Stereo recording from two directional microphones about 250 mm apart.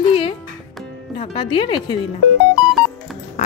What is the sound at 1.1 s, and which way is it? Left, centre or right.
Speech, left.